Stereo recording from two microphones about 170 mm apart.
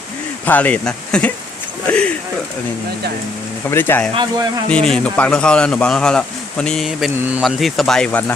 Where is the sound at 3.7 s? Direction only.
10° left (ahead or behind).